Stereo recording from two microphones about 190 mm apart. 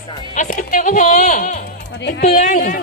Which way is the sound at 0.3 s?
40° left (ahead or behind).